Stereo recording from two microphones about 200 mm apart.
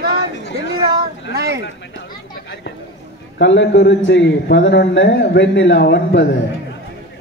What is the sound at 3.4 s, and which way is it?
A man's voice, 65° left (ahead or behind).